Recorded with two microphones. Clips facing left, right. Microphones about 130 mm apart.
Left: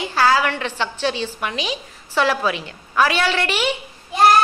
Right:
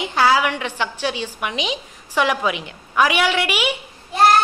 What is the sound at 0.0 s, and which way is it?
A woman's voice, 15° right (ahead or behind).